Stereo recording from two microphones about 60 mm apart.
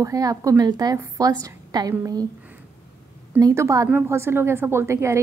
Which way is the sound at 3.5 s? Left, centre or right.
Right.